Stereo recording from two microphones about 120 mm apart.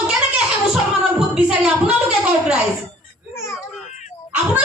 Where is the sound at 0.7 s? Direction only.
5° right (ahead or behind).